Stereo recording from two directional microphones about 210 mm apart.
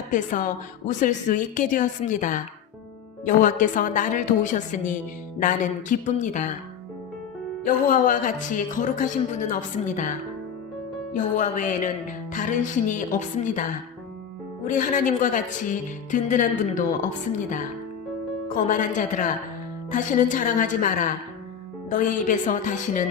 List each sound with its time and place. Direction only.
0.1 s music: 40° left (ahead or behind)
7.6 s music: 40° left (ahead or behind)
18.4 s music: 40° left (ahead or behind)